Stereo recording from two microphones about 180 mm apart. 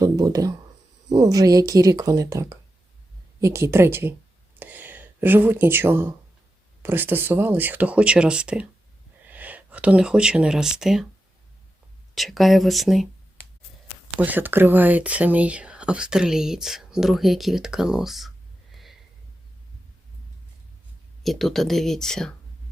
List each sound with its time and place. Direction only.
0.0 s speech: 20° right (ahead or behind)
4.6 s a sound: 10° right (ahead or behind)
6.8 s speech: 10° right (ahead or behind)
12.1 s speech: centre (ahead or behind)
14.2 s speech: 10° right (ahead or behind)
18.7 s a sound: centre (ahead or behind)
21.2 s speech: centre (ahead or behind)